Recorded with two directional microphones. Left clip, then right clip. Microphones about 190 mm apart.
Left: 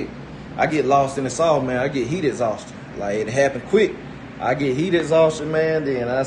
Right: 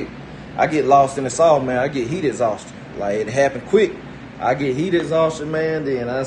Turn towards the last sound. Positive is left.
turn(degrees=5)  # may be behind; listen again after turning